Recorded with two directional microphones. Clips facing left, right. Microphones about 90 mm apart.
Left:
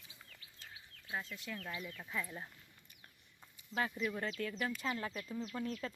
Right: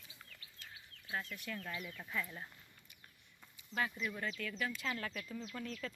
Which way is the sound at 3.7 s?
30° left (ahead or behind).